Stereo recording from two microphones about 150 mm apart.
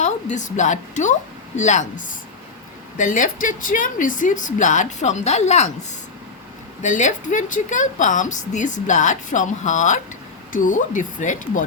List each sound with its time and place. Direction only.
0.0 s a woman's voice: 55° left (ahead or behind)
6.8 s a woman's voice: 55° left (ahead or behind)